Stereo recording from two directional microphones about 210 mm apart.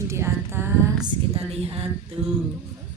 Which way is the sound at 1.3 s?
30° right (ahead or behind).